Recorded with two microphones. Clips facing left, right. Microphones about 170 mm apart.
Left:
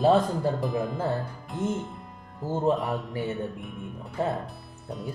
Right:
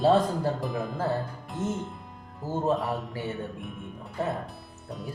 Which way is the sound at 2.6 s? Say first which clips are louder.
Left 2 dB; centre (ahead or behind).